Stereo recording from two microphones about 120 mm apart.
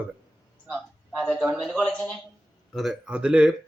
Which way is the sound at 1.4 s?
5° right (ahead or behind).